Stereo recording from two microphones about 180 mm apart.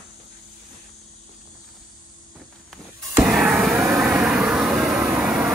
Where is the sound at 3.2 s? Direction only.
5° right (ahead or behind).